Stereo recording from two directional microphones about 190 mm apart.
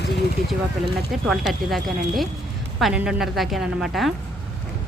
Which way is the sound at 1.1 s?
Centre (ahead or behind).